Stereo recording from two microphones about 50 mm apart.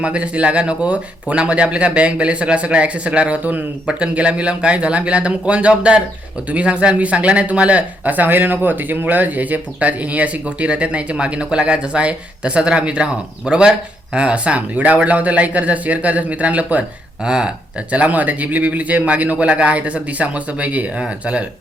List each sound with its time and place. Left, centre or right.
0.0 s speech: right
17.2 s speech: centre
17.9 s speech: right